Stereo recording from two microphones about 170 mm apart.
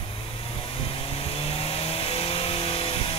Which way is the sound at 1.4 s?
35° left (ahead or behind).